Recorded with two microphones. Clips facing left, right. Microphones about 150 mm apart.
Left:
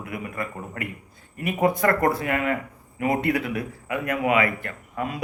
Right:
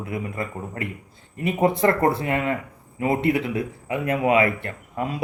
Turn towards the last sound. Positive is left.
turn(degrees=-30)  # may be behind; listen again after turning